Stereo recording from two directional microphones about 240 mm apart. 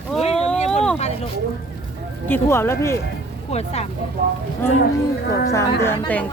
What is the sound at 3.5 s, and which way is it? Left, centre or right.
Speech, left.